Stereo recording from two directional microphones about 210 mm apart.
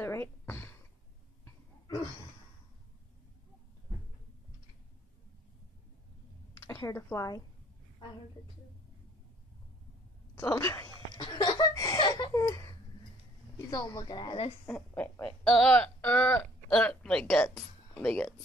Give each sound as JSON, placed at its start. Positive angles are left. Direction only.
{"t": 0.0, "sound": "a sound", "side_deg": 10}
{"t": 6.7, "sound": "a woman's voice", "side_deg": 15}
{"t": 10.3, "sound": "a woman's voice", "side_deg": 10}
{"t": 11.1, "sound": "a sound", "side_deg": 20}
{"t": 13.6, "sound": "a woman's voice", "side_deg": 15}
{"t": 14.7, "sound": "speech", "side_deg": 10}